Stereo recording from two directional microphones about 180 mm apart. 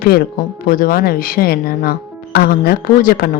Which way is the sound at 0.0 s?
60° left (ahead or behind).